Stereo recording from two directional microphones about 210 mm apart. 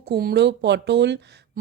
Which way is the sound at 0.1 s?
50° right (ahead or behind).